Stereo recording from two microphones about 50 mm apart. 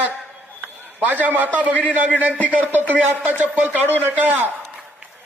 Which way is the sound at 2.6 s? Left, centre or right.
Right.